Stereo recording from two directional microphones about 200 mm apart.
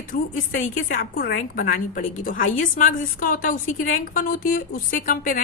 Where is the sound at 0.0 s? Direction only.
45° left (ahead or behind).